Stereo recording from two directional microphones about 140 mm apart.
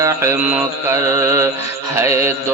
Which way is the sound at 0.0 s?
20° right (ahead or behind).